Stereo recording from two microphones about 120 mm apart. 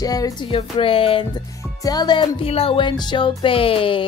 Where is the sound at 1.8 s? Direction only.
35° left (ahead or behind).